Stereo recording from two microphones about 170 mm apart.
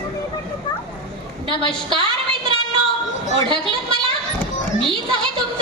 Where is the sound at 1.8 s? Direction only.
30° right (ahead or behind).